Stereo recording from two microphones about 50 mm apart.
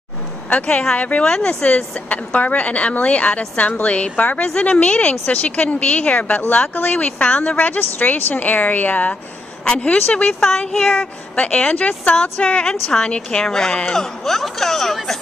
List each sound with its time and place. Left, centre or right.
0.5 s a woman's voice: left
1.2 s a woman's voice: centre
7.5 s a woman's voice: left; by 15.0 s centre